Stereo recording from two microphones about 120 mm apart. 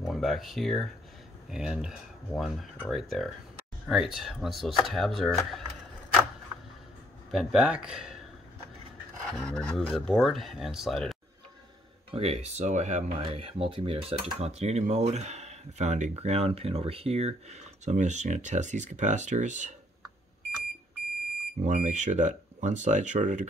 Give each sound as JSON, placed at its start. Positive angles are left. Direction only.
{"t": 0.0, "sound": "speech", "side_deg": 0}
{"t": 7.2, "sound": "speech", "side_deg": -5}
{"t": 9.3, "sound": "speech", "side_deg": 5}
{"t": 12.1, "sound": "cutlery", "side_deg": -60}
{"t": 13.2, "sound": "cutlery", "side_deg": -50}
{"t": 21.5, "sound": "speech", "side_deg": -90}